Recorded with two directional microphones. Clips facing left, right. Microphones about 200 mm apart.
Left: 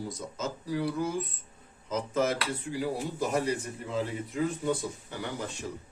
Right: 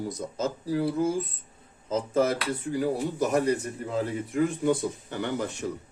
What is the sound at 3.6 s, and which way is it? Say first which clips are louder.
Speech: right 3 dB; 50° right (ahead or behind).